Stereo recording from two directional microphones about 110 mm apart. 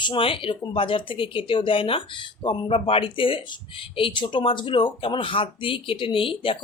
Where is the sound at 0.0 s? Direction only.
50° left (ahead or behind).